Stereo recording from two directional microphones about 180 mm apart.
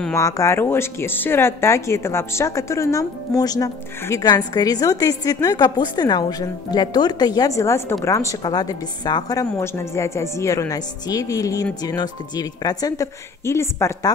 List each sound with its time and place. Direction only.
0.1 s speech: 15° left (ahead or behind)